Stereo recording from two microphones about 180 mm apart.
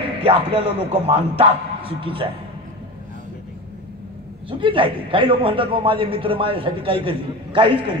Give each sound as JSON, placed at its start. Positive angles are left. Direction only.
{"t": 0.2, "sound": "a man's voice", "side_deg": -30}
{"t": 4.5, "sound": "a man's voice", "side_deg": -30}